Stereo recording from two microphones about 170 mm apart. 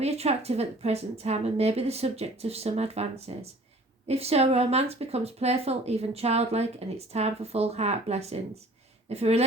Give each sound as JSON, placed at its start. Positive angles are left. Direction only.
{"t": 0.0, "sound": "speech", "side_deg": -35}